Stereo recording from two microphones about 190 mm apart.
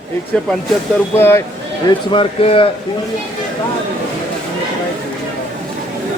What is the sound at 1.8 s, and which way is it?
Speech, 25° left (ahead or behind).